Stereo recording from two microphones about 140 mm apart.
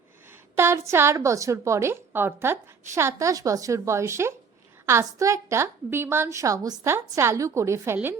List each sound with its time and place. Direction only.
0.3 s a woman's voice: 15° right (ahead or behind)